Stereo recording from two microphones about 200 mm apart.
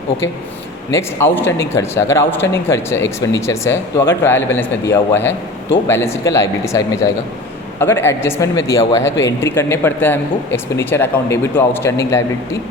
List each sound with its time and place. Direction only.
0.9 s speech: 10° left (ahead or behind)